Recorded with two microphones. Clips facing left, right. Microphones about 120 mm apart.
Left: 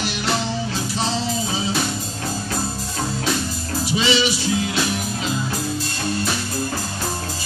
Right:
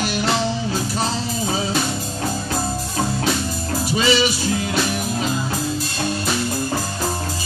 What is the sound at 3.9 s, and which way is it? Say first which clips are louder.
Music: right 1 dB; 45° right (ahead or behind).